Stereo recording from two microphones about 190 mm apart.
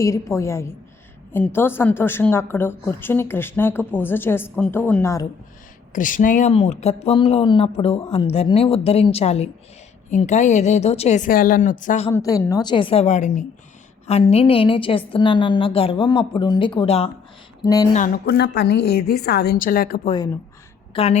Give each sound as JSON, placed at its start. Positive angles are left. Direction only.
{"t": 0.0, "sound": "a woman's voice", "side_deg": 15}
{"t": 5.9, "sound": "speech", "side_deg": 45}
{"t": 12.1, "sound": "a woman's voice", "side_deg": 15}
{"t": 17.9, "sound": "a woman's voice", "side_deg": 45}
{"t": 20.9, "sound": "a woman's voice", "side_deg": 30}